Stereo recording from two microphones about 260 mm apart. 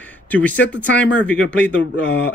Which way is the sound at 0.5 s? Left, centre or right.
Left.